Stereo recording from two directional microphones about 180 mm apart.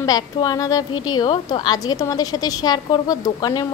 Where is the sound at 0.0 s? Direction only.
20° left (ahead or behind).